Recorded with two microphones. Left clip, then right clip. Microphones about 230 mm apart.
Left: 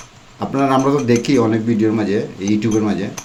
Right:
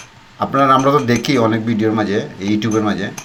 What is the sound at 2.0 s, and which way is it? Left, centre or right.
Speech, right.